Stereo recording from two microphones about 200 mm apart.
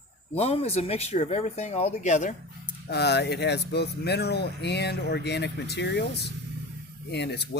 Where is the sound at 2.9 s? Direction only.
55° left (ahead or behind).